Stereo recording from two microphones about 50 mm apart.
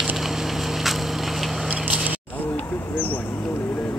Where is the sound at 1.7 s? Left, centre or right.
Right.